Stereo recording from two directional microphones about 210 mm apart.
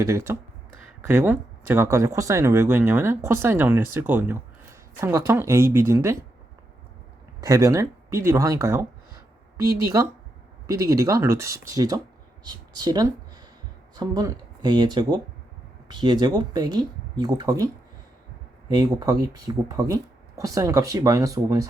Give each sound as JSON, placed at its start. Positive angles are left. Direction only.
{"t": 0.0, "sound": "speech", "side_deg": -15}
{"t": 7.4, "sound": "speech", "side_deg": -15}
{"t": 18.7, "sound": "speech", "side_deg": -20}